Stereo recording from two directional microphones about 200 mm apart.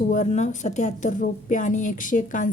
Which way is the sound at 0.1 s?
35° left (ahead or behind).